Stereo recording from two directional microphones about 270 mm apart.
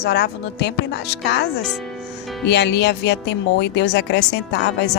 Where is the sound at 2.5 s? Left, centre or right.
Left.